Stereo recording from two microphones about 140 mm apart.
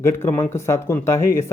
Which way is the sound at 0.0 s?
20° left (ahead or behind).